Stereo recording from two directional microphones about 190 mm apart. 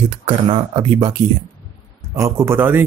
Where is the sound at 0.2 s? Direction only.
30° right (ahead or behind).